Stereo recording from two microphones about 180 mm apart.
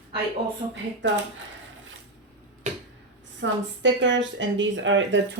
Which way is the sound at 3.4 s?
90° right.